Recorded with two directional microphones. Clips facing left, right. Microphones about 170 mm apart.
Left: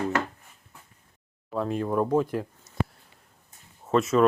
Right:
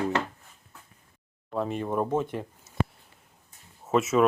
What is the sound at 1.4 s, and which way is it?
Speech, centre (ahead or behind).